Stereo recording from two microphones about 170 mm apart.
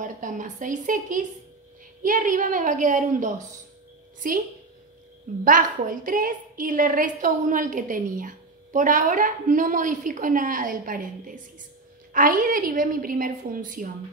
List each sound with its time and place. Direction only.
0.0 s a woman's voice: 50° right (ahead or behind)